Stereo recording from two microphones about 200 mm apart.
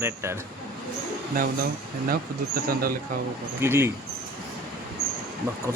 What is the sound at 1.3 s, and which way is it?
Speech, 45° right (ahead or behind).